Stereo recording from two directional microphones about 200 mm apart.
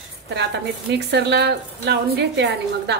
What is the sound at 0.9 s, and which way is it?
A woman's voice, 55° right (ahead or behind).